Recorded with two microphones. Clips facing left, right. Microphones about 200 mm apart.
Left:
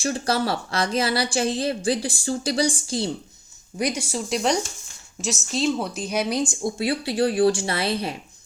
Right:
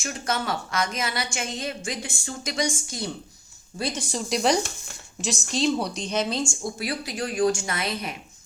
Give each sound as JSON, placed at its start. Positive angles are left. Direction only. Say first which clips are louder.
{"t": 0.0, "sound": "a woman's voice", "louder": "left 5 dB", "side_deg": 35}
{"t": 3.8, "sound": "a woman's voice", "louder": "left 4 dB", "side_deg": 15}